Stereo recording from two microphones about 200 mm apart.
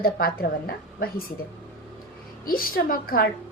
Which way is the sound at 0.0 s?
45° left (ahead or behind).